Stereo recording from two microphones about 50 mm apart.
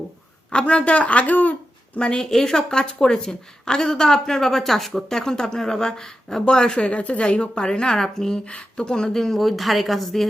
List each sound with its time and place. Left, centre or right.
0.5 s a woman's voice: centre
2.0 s a woman's voice: centre
8.4 s a woman's voice: left; by 10.2 s centre